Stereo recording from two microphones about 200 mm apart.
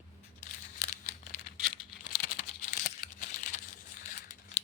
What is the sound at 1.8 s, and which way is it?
Computer keyboard, 20° left (ahead or behind).